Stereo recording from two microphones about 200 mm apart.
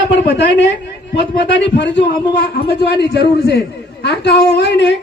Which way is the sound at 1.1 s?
60° left (ahead or behind).